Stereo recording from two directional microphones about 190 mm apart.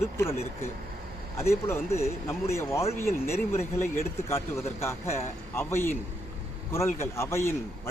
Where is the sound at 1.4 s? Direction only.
15° left (ahead or behind).